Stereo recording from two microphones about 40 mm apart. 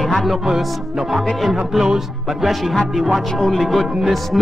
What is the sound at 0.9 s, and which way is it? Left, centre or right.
Music, centre.